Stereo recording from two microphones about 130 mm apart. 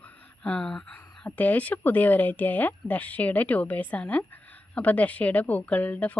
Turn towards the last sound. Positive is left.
turn(degrees=10)  # may be behind; listen again after turning